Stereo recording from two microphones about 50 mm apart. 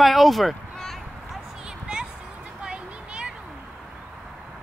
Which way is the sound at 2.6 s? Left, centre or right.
Right.